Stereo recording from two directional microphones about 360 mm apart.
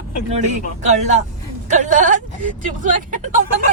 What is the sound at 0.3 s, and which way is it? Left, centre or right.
A man's voice, centre.